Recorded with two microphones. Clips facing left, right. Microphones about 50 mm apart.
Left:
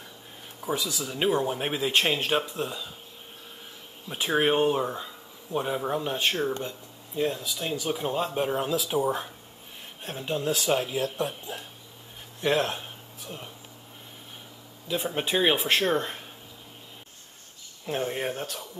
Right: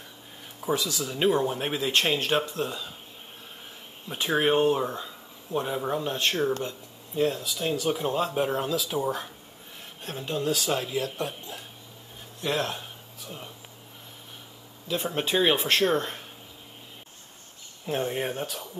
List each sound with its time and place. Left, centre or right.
0.7 s speech: centre
4.1 s speech: centre
10.4 s speech: left
12.4 s speech: left
14.9 s speech: centre
17.8 s speech: centre